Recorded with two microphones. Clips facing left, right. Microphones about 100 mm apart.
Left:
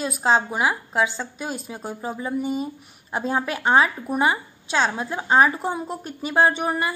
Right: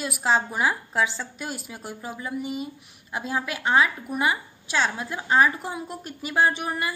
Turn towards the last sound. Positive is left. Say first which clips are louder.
# left 3 dB
turn(degrees=30)  # may be behind; listen again after turning